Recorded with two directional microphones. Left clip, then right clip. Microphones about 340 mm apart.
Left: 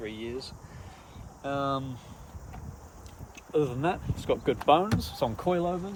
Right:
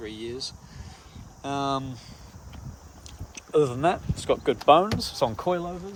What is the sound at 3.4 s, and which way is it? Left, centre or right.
Speech, right.